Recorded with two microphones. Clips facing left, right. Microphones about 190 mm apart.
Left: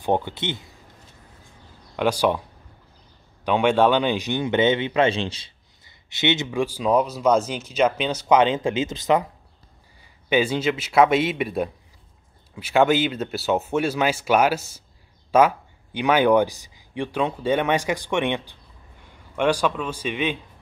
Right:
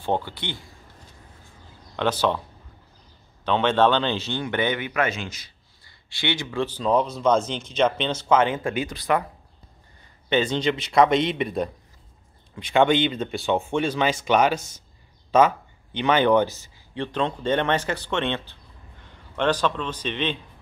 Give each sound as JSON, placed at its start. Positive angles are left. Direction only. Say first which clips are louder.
{"t": 0.0, "sound": "speech", "louder": "left 3 dB", "side_deg": 20}
{"t": 2.0, "sound": "speech", "louder": "left 2 dB", "side_deg": 10}
{"t": 3.4, "sound": "speech", "louder": "left 2 dB", "side_deg": 10}
{"t": 6.6, "sound": "speech", "louder": "left 1 dB", "side_deg": 10}
{"t": 9.9, "sound": "a man's voice", "louder": "left 2 dB", "side_deg": 10}